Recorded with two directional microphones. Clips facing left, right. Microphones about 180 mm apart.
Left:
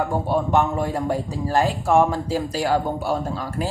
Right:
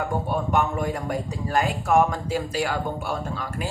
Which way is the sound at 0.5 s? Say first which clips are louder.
Left 3 dB; 30° left (ahead or behind).